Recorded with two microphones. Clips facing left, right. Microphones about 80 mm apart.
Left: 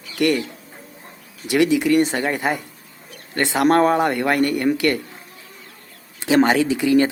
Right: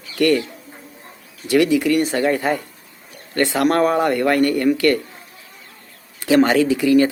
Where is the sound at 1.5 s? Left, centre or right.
Left.